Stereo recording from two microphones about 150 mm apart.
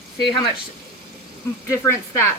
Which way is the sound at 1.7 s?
20° left (ahead or behind).